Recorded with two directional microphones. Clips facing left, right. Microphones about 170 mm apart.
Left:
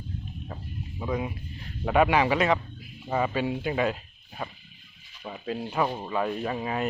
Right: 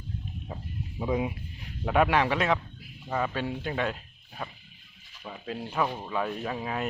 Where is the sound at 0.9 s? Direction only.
15° right (ahead or behind).